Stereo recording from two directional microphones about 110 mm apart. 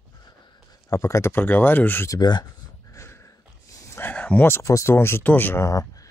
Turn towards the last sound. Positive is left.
turn(degrees=25)  # may be behind; listen again after turning